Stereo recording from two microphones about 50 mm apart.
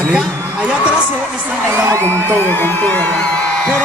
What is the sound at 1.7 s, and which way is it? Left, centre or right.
Whoop, right.